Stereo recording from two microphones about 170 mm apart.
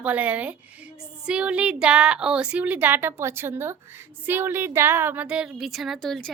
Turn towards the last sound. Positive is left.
turn(degrees=5)  # may be behind; listen again after turning